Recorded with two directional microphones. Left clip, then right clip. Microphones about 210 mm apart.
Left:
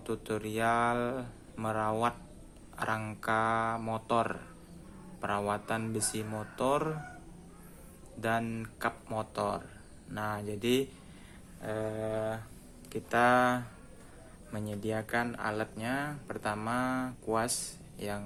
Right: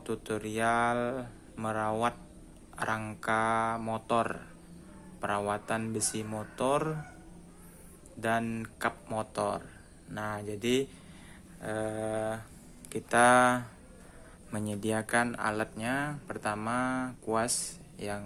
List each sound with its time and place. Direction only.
0.0 s speech: 5° right (ahead or behind)
8.2 s speech: 10° right (ahead or behind)
11.6 s speech: 15° right (ahead or behind)